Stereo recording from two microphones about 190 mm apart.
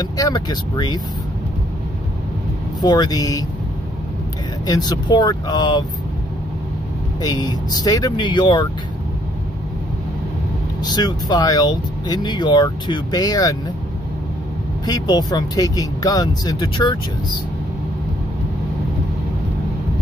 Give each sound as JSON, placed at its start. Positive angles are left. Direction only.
{"t": 0.0, "sound": "speech", "side_deg": 20}
{"t": 2.8, "sound": "speech", "side_deg": 20}
{"t": 4.6, "sound": "speech", "side_deg": 20}
{"t": 7.2, "sound": "speech", "side_deg": 20}
{"t": 10.8, "sound": "speech", "side_deg": 20}
{"t": 14.9, "sound": "speech", "side_deg": 20}